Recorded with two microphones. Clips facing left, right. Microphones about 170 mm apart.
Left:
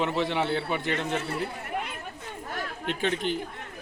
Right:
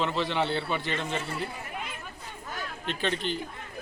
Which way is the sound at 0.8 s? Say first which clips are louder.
Left 3 dB; 60° left (ahead or behind).